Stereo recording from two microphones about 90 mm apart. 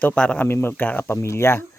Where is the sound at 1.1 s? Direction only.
30° left (ahead or behind).